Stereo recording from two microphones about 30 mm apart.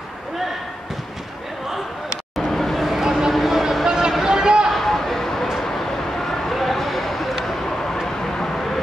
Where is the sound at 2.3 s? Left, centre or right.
Centre.